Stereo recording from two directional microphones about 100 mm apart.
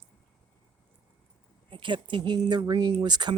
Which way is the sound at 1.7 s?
55° right (ahead or behind).